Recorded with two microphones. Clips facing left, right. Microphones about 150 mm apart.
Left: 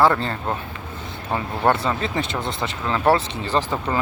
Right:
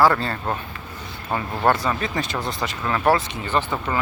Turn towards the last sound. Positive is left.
turn(degrees=35)  # may be behind; listen again after turning